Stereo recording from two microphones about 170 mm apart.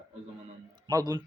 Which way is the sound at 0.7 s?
25° right (ahead or behind).